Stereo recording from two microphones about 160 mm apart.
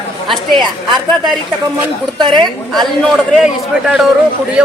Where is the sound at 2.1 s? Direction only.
30° right (ahead or behind).